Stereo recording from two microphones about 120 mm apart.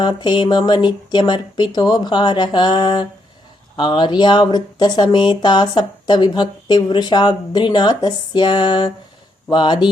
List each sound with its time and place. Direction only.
0.0 s speech: 40° left (ahead or behind)